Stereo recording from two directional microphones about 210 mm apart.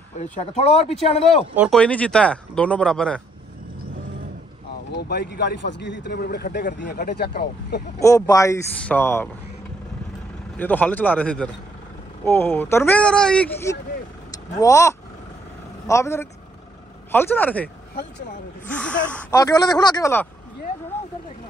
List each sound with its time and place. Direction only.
0.2 s speech: 30° left (ahead or behind)
1.2 s speech: centre (ahead or behind)
4.9 s speech: 50° left (ahead or behind)
8.0 s speech: 15° left (ahead or behind)
10.6 s speech: 10° left (ahead or behind)
18.7 s speech: 5° left (ahead or behind)
19.4 s speech: 15° left (ahead or behind)